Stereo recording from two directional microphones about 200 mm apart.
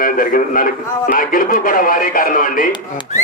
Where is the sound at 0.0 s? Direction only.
45° left (ahead or behind).